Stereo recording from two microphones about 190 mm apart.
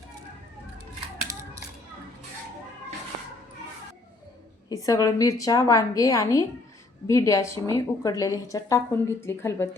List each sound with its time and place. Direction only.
4.7 s a woman's voice: 15° left (ahead or behind)